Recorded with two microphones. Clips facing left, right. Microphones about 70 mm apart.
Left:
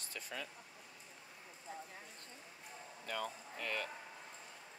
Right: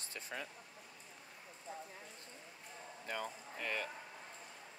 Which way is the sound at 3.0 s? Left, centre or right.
Centre.